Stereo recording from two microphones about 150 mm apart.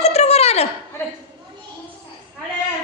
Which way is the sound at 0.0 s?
45° left (ahead or behind).